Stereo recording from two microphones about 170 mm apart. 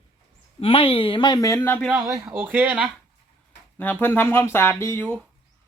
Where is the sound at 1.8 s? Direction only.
10° right (ahead or behind).